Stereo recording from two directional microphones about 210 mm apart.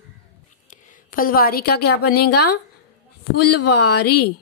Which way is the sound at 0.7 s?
40° left (ahead or behind).